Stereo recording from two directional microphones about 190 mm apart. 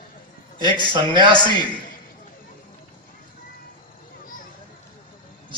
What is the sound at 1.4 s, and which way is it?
Speech, 25° left (ahead or behind).